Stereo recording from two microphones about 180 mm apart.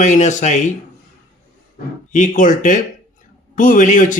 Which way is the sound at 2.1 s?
45° left (ahead or behind).